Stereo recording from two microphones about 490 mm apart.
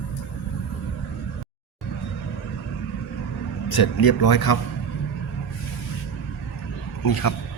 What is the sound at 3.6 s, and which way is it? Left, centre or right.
Speech, left.